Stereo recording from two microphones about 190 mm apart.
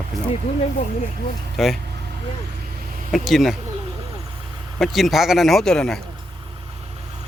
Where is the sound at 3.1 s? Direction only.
Centre (ahead or behind).